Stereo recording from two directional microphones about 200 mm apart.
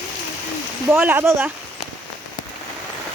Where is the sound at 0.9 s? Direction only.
10° right (ahead or behind).